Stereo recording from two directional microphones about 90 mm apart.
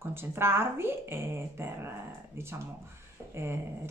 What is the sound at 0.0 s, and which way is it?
A woman's voice, 25° right (ahead or behind).